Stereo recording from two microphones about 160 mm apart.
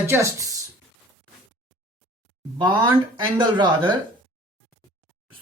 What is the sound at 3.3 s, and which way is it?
Speech, 30° right (ahead or behind).